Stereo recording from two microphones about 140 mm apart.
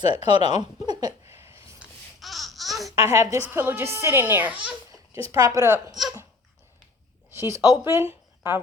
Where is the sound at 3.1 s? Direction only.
20° right (ahead or behind).